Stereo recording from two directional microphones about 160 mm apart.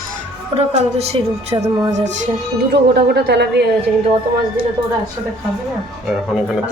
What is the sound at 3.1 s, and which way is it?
Speech, 90° right.